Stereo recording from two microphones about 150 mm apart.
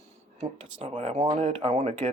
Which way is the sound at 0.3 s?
40° right (ahead or behind).